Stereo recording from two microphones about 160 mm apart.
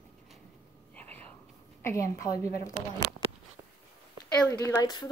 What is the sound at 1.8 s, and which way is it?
Speech, 20° left (ahead or behind).